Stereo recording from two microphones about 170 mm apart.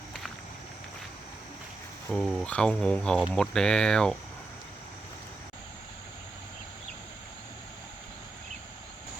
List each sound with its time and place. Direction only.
2.0 s speech: centre (ahead or behind)